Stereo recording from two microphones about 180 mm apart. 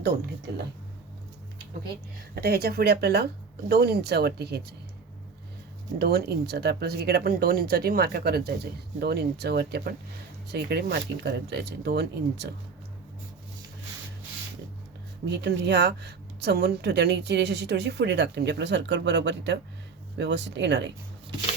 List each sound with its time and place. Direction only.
2.3 s speech: 60° right (ahead or behind)
6.0 s speech: 65° right (ahead or behind)
15.4 s a woman's voice: 70° right (ahead or behind)